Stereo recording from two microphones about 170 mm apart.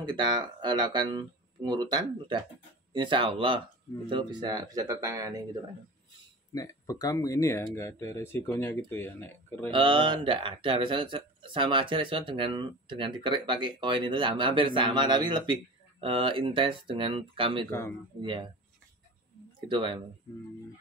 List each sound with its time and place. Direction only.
0.1 s speech: 25° right (ahead or behind)
6.5 s speech: 20° left (ahead or behind)
9.7 s speech: 30° right (ahead or behind)
17.6 s speech: 15° left (ahead or behind)
18.2 s speech: 30° right (ahead or behind)
19.7 s speech: 30° right (ahead or behind)